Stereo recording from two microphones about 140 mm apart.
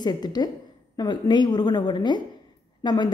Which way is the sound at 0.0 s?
30° left (ahead or behind).